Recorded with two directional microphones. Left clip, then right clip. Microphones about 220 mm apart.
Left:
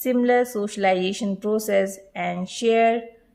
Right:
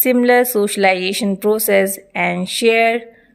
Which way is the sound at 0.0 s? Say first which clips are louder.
Right 7 dB; 35° right (ahead or behind).